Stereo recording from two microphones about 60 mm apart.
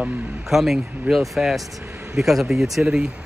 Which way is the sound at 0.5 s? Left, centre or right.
Centre.